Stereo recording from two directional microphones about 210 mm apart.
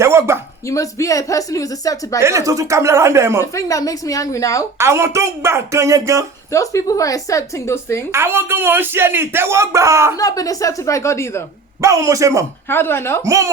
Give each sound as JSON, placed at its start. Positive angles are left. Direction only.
{"t": 0.0, "sound": "speech", "side_deg": -10}
{"t": 0.6, "sound": "speech", "side_deg": 15}
{"t": 2.2, "sound": "speech", "side_deg": -15}
{"t": 3.4, "sound": "speech", "side_deg": 15}
{"t": 4.8, "sound": "speech", "side_deg": -10}
{"t": 6.5, "sound": "speech", "side_deg": 15}
{"t": 8.1, "sound": "speech", "side_deg": -10}
{"t": 10.2, "sound": "speech", "side_deg": 15}
{"t": 11.8, "sound": "speech", "side_deg": -15}
{"t": 12.6, "sound": "speech", "side_deg": 10}
{"t": 13.2, "sound": "speech", "side_deg": -15}